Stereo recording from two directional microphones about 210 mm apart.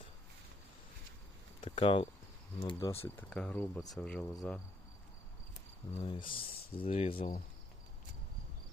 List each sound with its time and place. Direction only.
1.6 s speech: 25° left (ahead or behind); by 4.6 s 5° left (ahead or behind)
6.0 s speech: 20° left (ahead or behind)